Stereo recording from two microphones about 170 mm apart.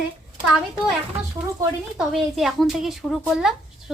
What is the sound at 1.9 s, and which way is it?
Speech, centre (ahead or behind).